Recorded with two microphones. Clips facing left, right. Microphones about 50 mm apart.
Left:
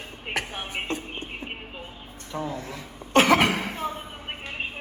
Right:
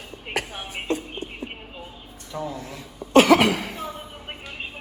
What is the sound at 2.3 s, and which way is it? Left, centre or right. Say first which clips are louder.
Cough: even; left.